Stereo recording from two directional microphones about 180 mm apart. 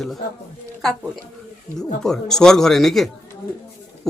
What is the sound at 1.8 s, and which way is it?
Speech, 5° left (ahead or behind).